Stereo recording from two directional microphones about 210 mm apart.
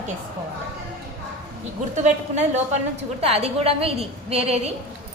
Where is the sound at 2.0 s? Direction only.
35° right (ahead or behind).